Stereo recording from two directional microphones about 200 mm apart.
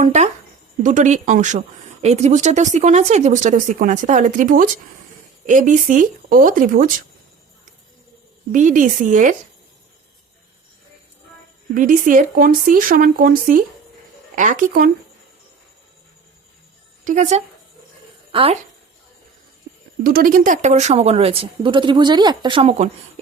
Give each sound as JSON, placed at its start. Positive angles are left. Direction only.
{"t": 0.0, "sound": "speech", "side_deg": -35}
{"t": 8.5, "sound": "speech", "side_deg": -40}
{"t": 11.7, "sound": "speech", "side_deg": -45}
{"t": 17.0, "sound": "speech", "side_deg": -40}
{"t": 18.3, "sound": "speech", "side_deg": -25}
{"t": 20.1, "sound": "speech", "side_deg": -45}